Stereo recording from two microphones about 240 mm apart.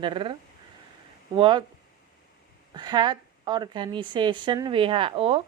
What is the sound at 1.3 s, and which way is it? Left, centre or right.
Speech, centre.